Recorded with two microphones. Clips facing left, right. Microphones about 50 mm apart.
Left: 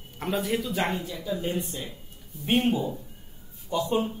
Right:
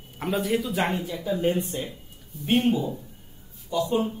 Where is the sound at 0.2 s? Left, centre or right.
Centre.